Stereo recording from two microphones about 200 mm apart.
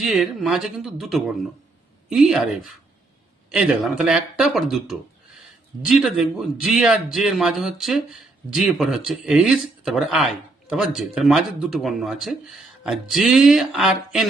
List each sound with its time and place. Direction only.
0.0 s a man's voice: centre (ahead or behind)
3.5 s a man's voice: 5° right (ahead or behind)